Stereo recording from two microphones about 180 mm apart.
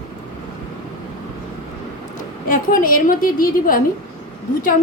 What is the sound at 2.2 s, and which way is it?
A woman's voice, 50° left (ahead or behind).